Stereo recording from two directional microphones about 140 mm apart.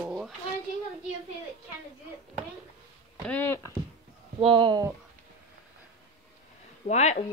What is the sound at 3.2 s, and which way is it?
Speech, 15° left (ahead or behind).